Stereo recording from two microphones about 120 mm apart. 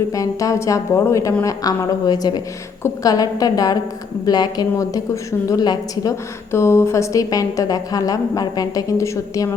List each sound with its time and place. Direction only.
0.1 s a woman's voice: 30° left (ahead or behind)
6.5 s a woman's voice: 20° left (ahead or behind)